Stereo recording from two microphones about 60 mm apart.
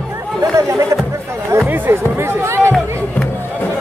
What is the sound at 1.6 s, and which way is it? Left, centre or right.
Music, right.